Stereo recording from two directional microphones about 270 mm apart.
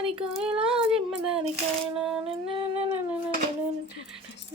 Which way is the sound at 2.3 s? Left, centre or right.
Right.